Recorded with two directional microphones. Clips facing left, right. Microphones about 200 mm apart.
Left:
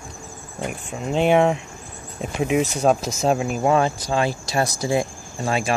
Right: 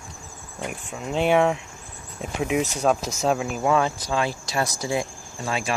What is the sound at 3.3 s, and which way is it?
Speech, 40° left (ahead or behind).